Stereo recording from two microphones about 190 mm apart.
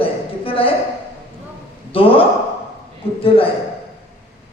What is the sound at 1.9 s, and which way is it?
Speech, 30° left (ahead or behind).